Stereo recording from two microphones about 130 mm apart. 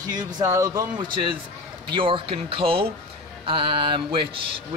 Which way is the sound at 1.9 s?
40° right (ahead or behind).